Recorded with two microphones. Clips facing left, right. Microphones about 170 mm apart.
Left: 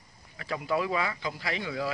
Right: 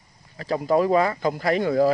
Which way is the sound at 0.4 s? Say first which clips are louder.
Right 9 dB; 40° right (ahead or behind).